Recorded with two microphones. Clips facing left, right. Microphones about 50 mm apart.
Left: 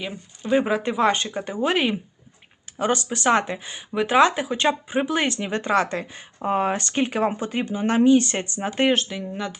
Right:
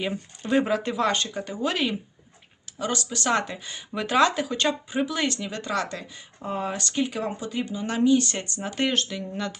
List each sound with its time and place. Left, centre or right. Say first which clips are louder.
0.5 s speech: left 2 dB; centre